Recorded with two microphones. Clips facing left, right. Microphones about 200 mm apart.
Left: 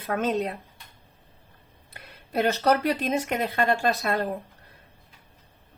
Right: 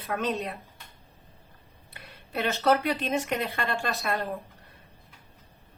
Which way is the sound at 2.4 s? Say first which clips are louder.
Left 1 dB; 40° left (ahead or behind).